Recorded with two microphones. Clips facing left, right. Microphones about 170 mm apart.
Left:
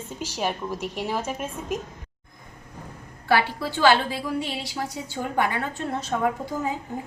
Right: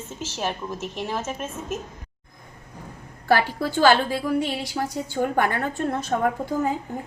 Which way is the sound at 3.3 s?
45° right (ahead or behind).